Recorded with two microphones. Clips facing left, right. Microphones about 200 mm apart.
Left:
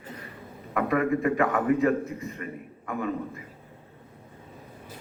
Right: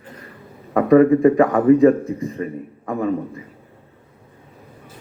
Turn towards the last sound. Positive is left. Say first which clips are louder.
# right 8 dB
turn(degrees=-35)  # may be behind; listen again after turning